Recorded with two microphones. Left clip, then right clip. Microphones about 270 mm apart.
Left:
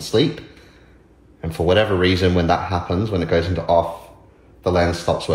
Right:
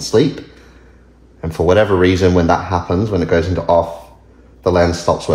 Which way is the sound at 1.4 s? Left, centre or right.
Right.